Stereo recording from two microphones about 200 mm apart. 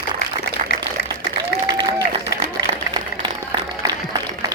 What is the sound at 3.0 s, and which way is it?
Applause, 20° right (ahead or behind).